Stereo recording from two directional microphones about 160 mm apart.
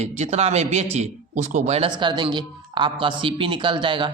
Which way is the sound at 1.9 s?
30° right (ahead or behind).